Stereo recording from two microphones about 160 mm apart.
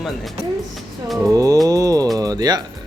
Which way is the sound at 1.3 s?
20° right (ahead or behind).